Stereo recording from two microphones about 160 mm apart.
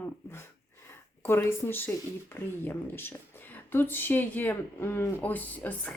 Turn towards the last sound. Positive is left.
turn(degrees=10)  # may be behind; listen again after turning